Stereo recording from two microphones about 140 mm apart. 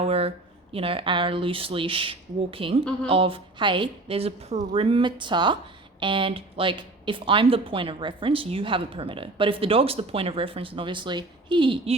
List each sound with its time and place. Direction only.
0.0 s speech: 45° right (ahead or behind)